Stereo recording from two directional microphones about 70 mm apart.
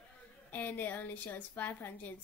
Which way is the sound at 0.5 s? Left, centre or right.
Left.